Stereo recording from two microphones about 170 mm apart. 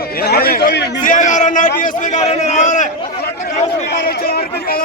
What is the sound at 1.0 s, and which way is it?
A man's voice, 50° left (ahead or behind).